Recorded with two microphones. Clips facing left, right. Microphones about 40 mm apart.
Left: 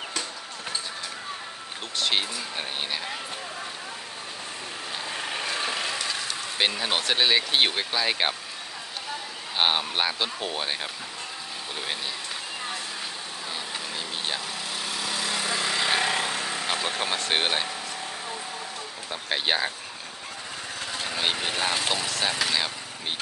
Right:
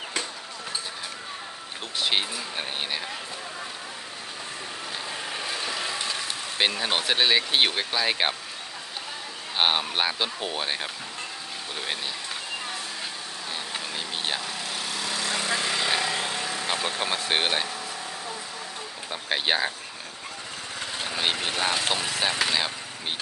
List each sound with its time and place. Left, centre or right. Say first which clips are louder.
2.0 s speech: even; centre
5.1 s vehicle: left 3 dB; centre
6.6 s speech: right 1 dB; centre
9.6 s speech: even; centre
13.7 s vehicle: right 1 dB; centre
14.4 s vehicle: even; centre
16.0 s vehicle: left 2 dB; left
16.6 s vehicle: right 1 dB; centre
17.0 s speech: right 1 dB; centre
19.0 s speech: right 1 dB; centre
21.0 s speech: even; centre